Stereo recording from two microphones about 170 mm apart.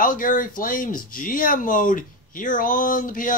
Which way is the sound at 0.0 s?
55° left (ahead or behind).